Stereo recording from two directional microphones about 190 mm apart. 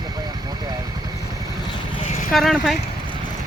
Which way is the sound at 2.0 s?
35° left (ahead or behind).